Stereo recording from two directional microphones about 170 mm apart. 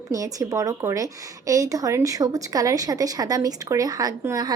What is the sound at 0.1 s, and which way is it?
A woman's voice, 20° right (ahead or behind).